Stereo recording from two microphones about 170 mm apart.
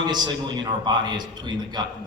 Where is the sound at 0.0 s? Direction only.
25° right (ahead or behind).